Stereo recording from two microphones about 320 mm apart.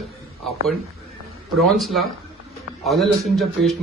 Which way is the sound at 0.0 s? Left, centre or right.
Centre.